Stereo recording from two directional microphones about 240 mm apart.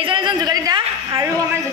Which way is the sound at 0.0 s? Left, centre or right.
Centre.